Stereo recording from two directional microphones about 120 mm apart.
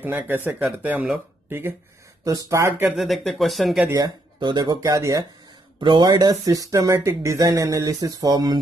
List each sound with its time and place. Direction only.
0.0 s speech: 15° right (ahead or behind)
2.9 s speech: centre (ahead or behind)
3.9 s speech: 35° right (ahead or behind)